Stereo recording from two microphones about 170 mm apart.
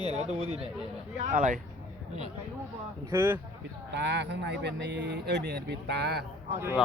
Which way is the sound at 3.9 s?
90° right.